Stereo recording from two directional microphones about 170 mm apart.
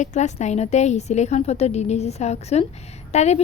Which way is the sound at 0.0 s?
45° left (ahead or behind).